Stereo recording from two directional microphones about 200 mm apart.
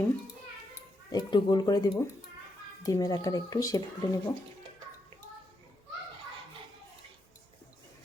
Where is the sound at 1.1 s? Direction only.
20° left (ahead or behind).